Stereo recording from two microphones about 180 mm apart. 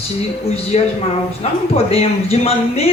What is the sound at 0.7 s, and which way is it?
Speech, 40° left (ahead or behind).